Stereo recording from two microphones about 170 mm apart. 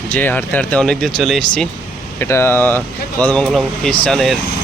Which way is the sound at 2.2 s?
15° left (ahead or behind).